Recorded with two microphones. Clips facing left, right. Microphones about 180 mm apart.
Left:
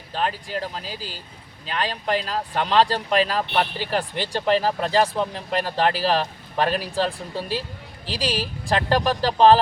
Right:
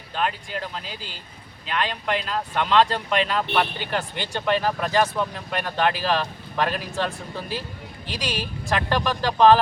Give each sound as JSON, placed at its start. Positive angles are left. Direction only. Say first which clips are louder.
{"t": 0.1, "sound": "speech", "louder": "left 1 dB", "side_deg": 35}